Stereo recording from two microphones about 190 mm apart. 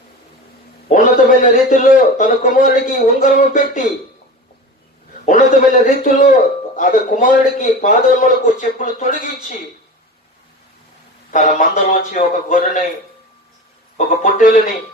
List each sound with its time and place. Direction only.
0.9 s a man's voice: 40° left (ahead or behind)
5.2 s a man's voice: 40° left (ahead or behind)
11.3 s a man's voice: 45° left (ahead or behind)
13.9 s a man's voice: 45° left (ahead or behind)